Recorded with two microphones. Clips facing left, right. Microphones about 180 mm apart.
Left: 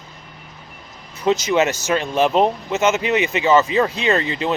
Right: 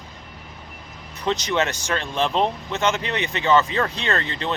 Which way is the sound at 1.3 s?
5° left (ahead or behind).